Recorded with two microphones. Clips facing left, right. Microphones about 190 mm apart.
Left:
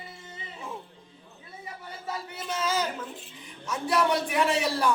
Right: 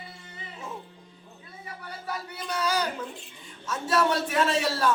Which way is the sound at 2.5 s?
20° left (ahead or behind).